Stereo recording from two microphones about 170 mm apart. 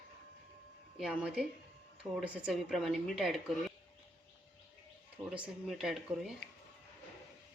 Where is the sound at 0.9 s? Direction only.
5° right (ahead or behind).